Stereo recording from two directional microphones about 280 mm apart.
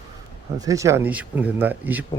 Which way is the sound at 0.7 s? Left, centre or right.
Centre.